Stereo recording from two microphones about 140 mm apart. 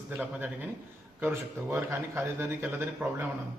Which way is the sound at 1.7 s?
15° right (ahead or behind).